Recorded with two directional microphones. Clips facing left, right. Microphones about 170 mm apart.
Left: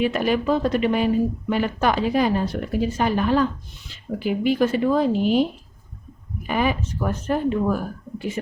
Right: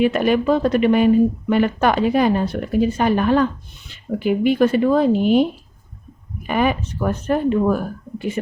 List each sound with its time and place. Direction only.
0.0 s speech: 60° right (ahead or behind)
6.5 s speech: 55° right (ahead or behind)